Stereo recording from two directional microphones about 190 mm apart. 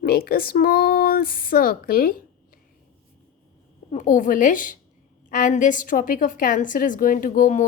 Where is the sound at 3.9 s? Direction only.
40° left (ahead or behind).